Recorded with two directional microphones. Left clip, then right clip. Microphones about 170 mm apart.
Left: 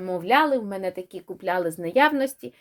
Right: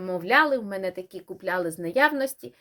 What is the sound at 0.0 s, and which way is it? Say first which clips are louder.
Speech: left 1 dB; 30° left (ahead or behind).